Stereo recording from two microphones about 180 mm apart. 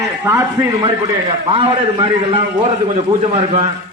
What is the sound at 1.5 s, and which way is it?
A man's voice, 30° right (ahead or behind).